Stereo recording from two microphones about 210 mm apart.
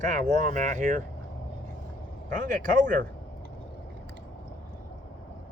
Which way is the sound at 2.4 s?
40° right (ahead or behind).